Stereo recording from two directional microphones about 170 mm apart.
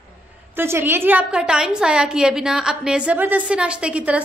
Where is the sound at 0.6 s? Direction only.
15° right (ahead or behind).